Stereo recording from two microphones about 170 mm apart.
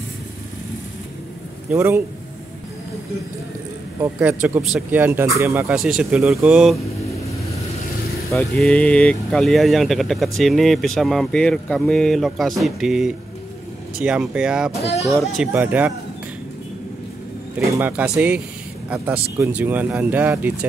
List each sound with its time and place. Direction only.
1.7 s speech: 15° right (ahead or behind)
4.0 s speech: 10° right (ahead or behind)
5.8 s speech: 5° right (ahead or behind)
8.3 s speech: 5° left (ahead or behind)
14.8 s speech: 35° left (ahead or behind)
15.0 s speech: centre (ahead or behind)
17.7 s speech: 10° right (ahead or behind)